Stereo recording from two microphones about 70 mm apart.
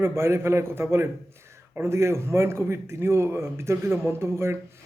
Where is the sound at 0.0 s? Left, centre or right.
Right.